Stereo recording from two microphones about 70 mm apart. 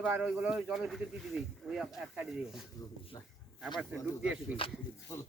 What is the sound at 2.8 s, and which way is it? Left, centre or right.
Speech, left.